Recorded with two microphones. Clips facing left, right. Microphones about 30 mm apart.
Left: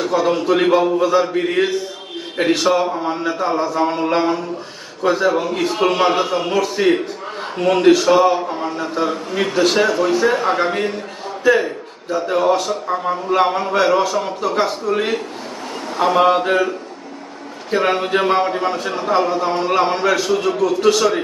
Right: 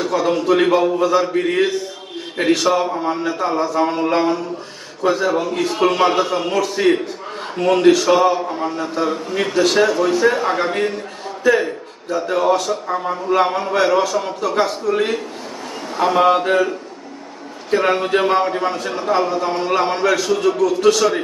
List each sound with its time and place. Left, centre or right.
0.0 s a man's voice: centre
17.7 s a man's voice: centre